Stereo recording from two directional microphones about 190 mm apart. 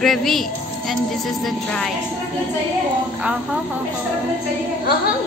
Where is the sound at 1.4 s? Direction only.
Centre (ahead or behind).